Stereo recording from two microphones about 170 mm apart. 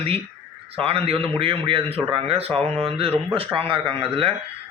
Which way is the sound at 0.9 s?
35° right (ahead or behind).